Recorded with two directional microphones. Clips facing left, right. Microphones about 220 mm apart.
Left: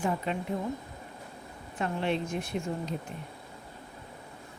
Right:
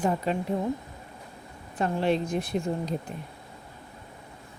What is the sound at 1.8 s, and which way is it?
A woman's voice, 40° right (ahead or behind).